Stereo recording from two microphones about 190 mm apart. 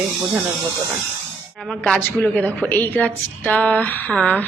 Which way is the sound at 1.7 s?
5° left (ahead or behind).